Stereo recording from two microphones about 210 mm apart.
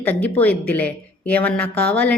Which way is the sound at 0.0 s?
5° left (ahead or behind).